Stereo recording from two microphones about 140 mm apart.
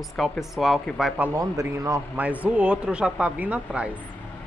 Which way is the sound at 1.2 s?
20° right (ahead or behind).